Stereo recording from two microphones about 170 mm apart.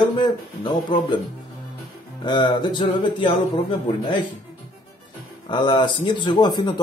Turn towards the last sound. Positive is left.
turn(degrees=25)  # may be behind; listen again after turning